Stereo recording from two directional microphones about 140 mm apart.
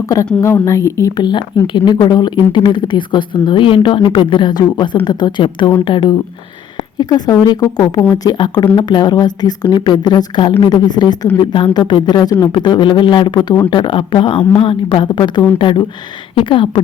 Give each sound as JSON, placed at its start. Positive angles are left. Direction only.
{"t": 0.4, "sound": "a woman's voice", "side_deg": 20}